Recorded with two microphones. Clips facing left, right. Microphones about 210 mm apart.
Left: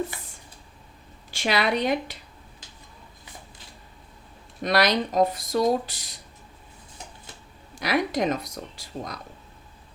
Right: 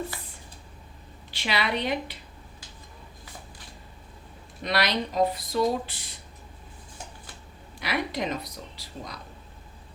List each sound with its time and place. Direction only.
1.3 s speech: 45° left (ahead or behind)
4.6 s speech: 45° left (ahead or behind)
7.8 s speech: 45° left (ahead or behind)